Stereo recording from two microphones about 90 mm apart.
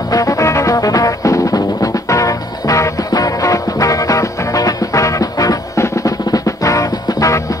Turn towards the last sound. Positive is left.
turn(degrees=40)  # may be behind; listen again after turning